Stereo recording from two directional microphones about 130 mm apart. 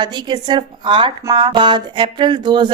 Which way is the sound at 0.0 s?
35° right (ahead or behind).